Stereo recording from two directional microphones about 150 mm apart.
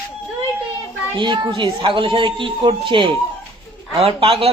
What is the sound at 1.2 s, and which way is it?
Speech, 30° right (ahead or behind).